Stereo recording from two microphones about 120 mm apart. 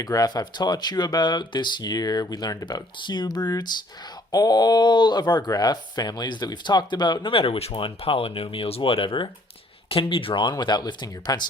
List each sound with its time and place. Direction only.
0.0 s speech: 30° left (ahead or behind)
10.5 s speech: 35° left (ahead or behind)